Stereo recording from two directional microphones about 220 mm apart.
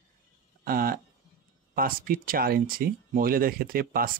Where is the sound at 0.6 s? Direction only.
40° right (ahead or behind).